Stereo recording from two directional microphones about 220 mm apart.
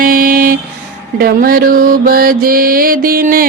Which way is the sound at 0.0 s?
40° right (ahead or behind).